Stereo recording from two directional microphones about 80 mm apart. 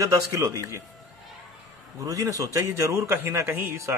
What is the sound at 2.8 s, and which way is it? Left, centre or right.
A man's voice, right.